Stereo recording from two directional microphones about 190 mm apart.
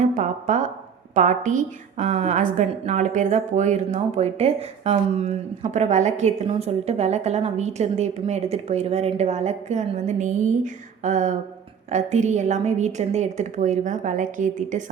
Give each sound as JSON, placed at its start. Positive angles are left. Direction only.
{"t": 0.0, "sound": "a woman's voice", "side_deg": -40}